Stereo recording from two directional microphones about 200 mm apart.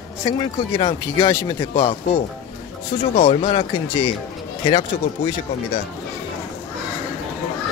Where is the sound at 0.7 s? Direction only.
20° left (ahead or behind).